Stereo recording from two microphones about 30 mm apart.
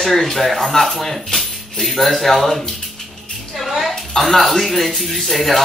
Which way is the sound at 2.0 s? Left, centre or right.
Centre.